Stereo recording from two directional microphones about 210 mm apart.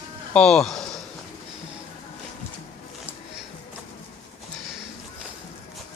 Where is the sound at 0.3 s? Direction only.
5° left (ahead or behind).